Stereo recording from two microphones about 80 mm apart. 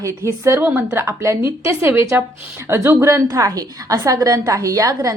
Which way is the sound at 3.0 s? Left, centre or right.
Right.